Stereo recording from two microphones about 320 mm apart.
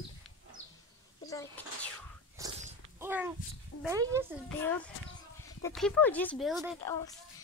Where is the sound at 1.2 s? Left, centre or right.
Centre.